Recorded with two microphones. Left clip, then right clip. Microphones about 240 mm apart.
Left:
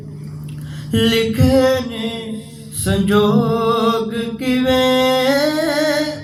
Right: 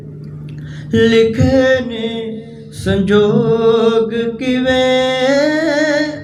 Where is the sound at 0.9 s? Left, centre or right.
Centre.